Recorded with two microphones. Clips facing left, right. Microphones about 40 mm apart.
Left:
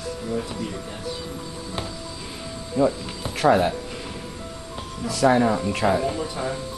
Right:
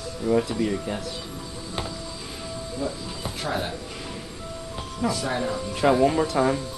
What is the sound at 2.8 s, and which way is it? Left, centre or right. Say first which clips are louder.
Speech: left 10 dB; left.